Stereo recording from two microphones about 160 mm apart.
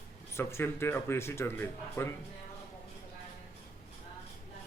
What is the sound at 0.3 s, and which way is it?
A man's voice, 15° left (ahead or behind).